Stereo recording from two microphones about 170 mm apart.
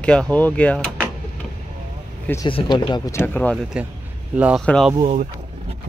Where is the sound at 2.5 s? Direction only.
30° left (ahead or behind); by 3.6 s 10° left (ahead or behind).